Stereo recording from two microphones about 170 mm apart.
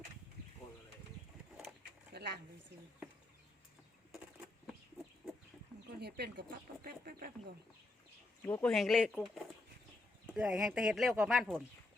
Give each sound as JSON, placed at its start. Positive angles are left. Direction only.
{"t": 2.1, "sound": "a sound", "side_deg": -75}
{"t": 6.0, "sound": "speech", "side_deg": -75}
{"t": 6.8, "sound": "speech", "side_deg": -55}
{"t": 8.4, "sound": "speech", "side_deg": 10}
{"t": 8.7, "sound": "speech", "side_deg": 0}